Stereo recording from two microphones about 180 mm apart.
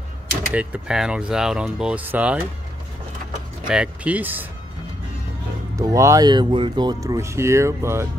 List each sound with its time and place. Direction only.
0.5 s speech: 5° right (ahead or behind)
3.6 s speech: 5° right (ahead or behind)
5.8 s speech: 20° right (ahead or behind)